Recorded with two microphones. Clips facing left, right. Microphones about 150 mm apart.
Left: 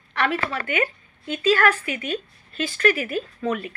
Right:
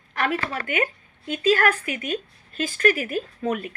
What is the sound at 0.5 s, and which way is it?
A woman's voice, 40° right (ahead or behind).